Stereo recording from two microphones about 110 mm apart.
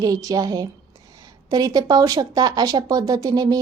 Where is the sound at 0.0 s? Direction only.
35° right (ahead or behind).